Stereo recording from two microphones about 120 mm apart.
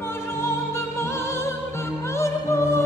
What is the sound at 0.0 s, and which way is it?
Music, 20° left (ahead or behind).